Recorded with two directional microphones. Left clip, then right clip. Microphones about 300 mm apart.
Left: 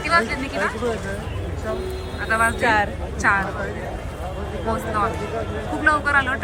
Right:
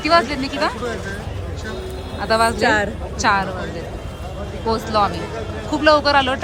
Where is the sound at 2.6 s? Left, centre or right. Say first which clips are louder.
Right 2 dB; right.